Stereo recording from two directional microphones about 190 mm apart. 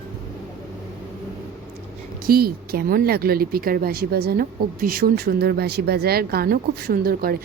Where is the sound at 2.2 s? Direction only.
50° right (ahead or behind).